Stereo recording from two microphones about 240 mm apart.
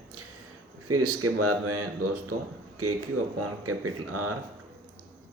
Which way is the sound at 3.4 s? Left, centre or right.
Right.